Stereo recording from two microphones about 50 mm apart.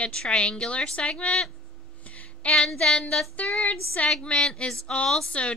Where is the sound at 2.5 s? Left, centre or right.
Centre.